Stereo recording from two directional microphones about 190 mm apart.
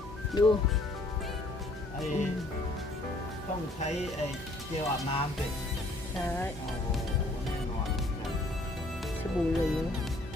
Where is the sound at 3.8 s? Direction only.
35° left (ahead or behind).